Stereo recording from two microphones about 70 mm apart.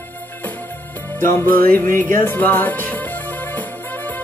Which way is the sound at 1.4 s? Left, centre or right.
Left.